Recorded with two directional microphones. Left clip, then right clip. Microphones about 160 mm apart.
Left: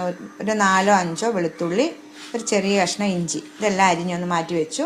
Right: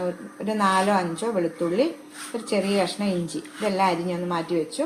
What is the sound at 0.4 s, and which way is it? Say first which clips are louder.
A woman's voice: left 4 dB; 35° left (ahead or behind).